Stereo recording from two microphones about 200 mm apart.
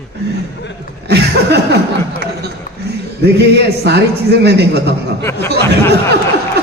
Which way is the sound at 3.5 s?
55° right (ahead or behind).